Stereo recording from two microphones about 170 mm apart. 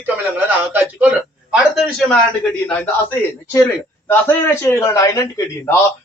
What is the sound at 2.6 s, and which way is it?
Speech, 10° left (ahead or behind).